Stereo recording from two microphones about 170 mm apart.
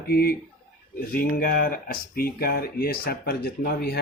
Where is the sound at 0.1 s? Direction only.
60° left (ahead or behind).